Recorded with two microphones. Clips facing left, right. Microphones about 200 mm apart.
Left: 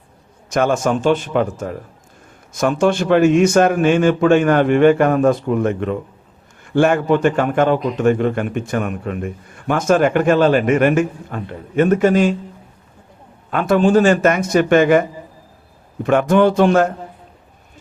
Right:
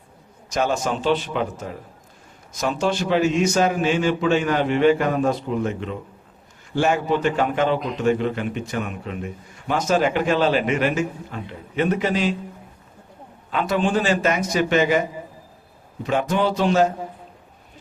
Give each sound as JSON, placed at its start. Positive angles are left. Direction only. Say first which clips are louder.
{"t": 0.5, "sound": "a man's voice", "louder": "left 6 dB", "side_deg": 50}
{"t": 13.5, "sound": "a man's voice", "louder": "left 7 dB", "side_deg": 50}
{"t": 16.0, "sound": "a man's voice", "louder": "left 8 dB", "side_deg": 55}